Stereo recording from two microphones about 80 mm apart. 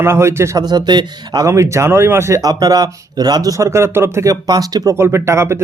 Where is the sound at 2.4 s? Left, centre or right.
Right.